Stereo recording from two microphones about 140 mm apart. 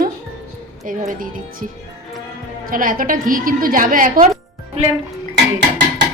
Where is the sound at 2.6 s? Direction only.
80° right.